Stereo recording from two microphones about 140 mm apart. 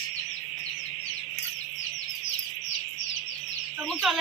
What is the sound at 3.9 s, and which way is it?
Fowl, centre (ahead or behind).